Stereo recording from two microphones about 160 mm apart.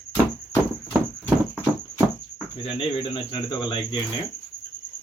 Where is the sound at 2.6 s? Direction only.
35° left (ahead or behind).